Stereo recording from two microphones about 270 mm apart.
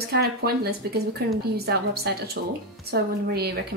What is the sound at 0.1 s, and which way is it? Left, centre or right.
A woman's voice, right.